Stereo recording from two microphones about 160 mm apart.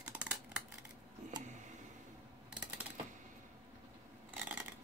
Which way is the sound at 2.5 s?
5° right (ahead or behind).